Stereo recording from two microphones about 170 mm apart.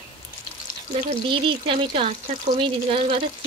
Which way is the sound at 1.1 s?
30° right (ahead or behind).